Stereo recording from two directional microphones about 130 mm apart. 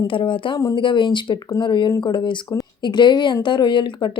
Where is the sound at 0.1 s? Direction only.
40° left (ahead or behind).